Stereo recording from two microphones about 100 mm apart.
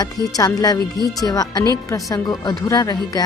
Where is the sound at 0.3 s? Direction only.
40° left (ahead or behind).